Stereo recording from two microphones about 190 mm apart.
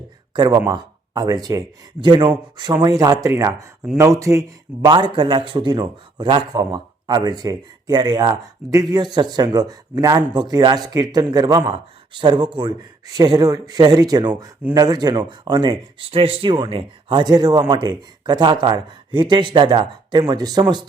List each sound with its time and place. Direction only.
0.3 s speech: 20° right (ahead or behind)